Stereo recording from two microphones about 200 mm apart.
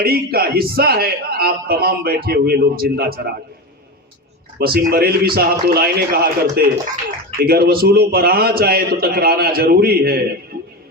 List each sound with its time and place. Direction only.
0.0 s a man's voice: 50° right (ahead or behind)
4.5 s a man's voice: 50° right (ahead or behind)